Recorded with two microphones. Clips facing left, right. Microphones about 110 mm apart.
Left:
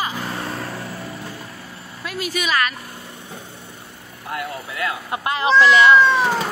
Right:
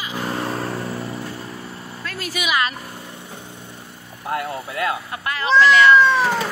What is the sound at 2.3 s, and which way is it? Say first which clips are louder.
Speech: even; 10° right (ahead or behind).